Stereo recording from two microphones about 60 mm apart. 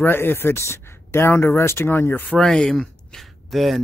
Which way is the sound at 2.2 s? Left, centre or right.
Centre.